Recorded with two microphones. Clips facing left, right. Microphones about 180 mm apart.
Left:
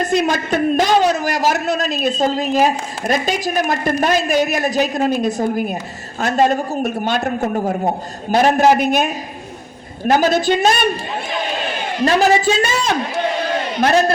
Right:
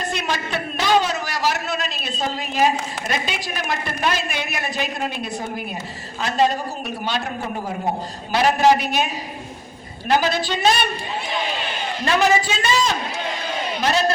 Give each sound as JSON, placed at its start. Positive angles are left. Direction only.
{"t": 0.0, "sound": "a man's voice", "side_deg": 45}
{"t": 12.0, "sound": "a woman's voice", "side_deg": 40}
{"t": 12.7, "sound": "a man's voice", "side_deg": 60}